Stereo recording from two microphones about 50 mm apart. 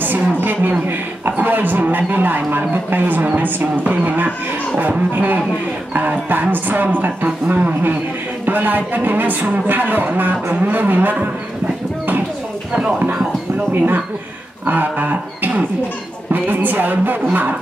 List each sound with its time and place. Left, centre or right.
0.0 s a sound: right
3.9 s speech: right
13.7 s speech: right